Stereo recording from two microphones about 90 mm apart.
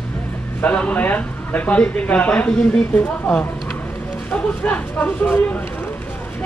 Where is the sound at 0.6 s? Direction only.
15° left (ahead or behind).